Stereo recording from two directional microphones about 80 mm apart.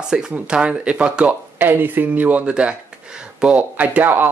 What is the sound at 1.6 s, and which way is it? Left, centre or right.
Speech, right.